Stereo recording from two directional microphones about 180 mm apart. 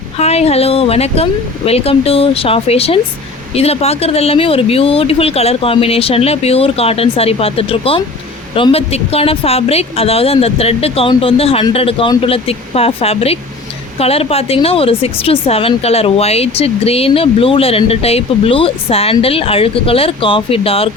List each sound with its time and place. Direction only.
0.2 s speech: 35° left (ahead or behind)